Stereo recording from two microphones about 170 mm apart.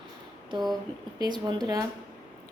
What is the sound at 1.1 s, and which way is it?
Speech, 25° right (ahead or behind).